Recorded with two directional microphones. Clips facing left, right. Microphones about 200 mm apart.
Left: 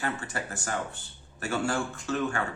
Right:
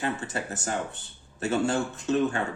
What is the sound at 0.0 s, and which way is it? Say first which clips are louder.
Speech: right 3 dB; 20° right (ahead or behind).